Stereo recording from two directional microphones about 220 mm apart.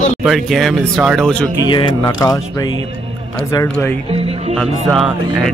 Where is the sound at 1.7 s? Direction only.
20° left (ahead or behind).